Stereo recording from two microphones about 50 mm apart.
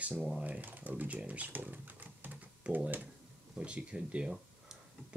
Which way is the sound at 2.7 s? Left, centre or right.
Right.